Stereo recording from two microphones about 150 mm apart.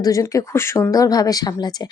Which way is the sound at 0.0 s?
20° left (ahead or behind).